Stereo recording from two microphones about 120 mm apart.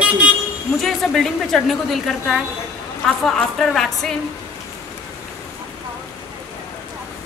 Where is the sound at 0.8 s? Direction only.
Centre (ahead or behind).